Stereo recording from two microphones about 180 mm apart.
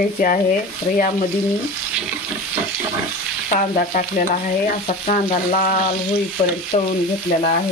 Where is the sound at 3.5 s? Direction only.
50° left (ahead or behind).